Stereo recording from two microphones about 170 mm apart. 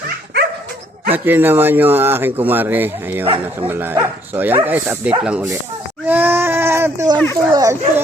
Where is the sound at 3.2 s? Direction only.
30° right (ahead or behind).